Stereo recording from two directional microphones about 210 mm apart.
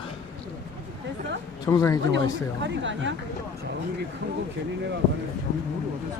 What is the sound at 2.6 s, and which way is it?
Speech, 60° right (ahead or behind).